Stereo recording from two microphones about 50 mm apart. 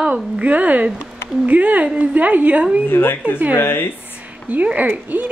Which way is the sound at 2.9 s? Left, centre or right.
Left.